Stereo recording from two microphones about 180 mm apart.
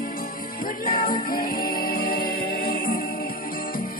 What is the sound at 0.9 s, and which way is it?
Music, 50° left (ahead or behind).